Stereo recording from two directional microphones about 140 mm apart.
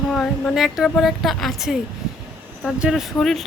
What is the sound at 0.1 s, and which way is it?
Speech, centre (ahead or behind).